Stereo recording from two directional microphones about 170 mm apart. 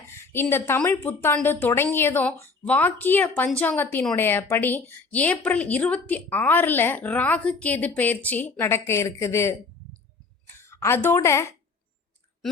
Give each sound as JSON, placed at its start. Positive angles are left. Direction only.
{"t": 0.2, "sound": "a woman's voice", "side_deg": 15}